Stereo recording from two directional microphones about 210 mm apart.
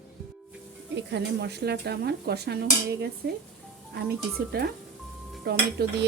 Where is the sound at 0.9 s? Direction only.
55° right (ahead or behind).